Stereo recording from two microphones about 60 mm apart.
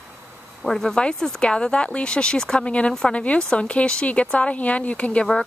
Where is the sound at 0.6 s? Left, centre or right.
Centre.